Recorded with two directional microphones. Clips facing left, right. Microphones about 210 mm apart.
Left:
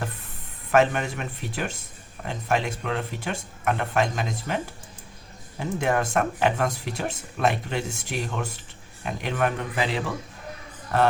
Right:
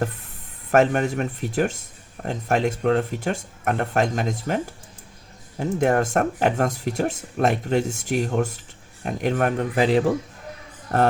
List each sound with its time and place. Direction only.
0.7 s speech: 45° right (ahead or behind)